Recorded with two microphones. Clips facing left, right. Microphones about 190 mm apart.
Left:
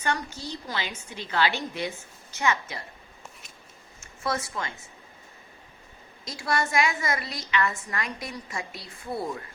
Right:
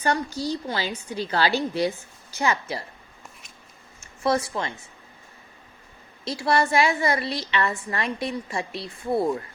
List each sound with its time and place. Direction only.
0.0 s a woman's voice: 35° right (ahead or behind)
4.2 s speech: 25° right (ahead or behind)
6.2 s a woman's voice: 30° right (ahead or behind)